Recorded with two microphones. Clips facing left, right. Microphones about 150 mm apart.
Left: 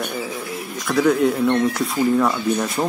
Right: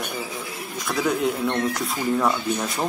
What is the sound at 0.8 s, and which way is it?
Speech, centre (ahead or behind).